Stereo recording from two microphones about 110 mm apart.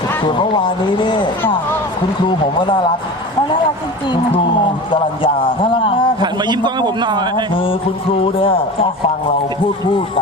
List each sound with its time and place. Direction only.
0.2 s speech: 45° left (ahead or behind)
4.3 s speech: 50° left (ahead or behind)
6.1 s a man's voice: 40° right (ahead or behind)
7.5 s speech: 55° left (ahead or behind)